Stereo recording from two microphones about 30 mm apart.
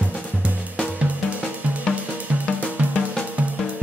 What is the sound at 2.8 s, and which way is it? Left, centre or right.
Drum, right.